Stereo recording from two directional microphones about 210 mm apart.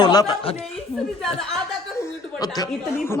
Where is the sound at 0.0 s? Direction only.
20° left (ahead or behind).